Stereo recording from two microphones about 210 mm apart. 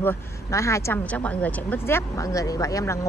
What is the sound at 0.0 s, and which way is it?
Speech, 10° left (ahead or behind).